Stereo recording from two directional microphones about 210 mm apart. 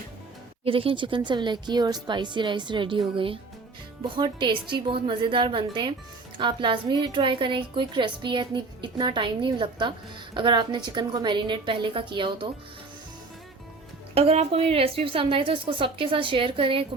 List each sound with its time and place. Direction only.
0.6 s a woman's voice: 25° right (ahead or behind)
14.2 s a woman's voice: 30° right (ahead or behind)